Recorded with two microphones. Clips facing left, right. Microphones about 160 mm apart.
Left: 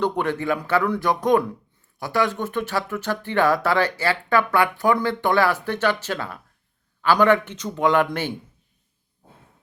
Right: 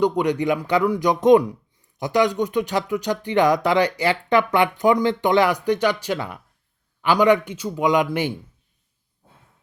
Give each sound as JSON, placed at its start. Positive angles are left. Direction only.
{"t": 0.0, "sound": "speech", "side_deg": -15}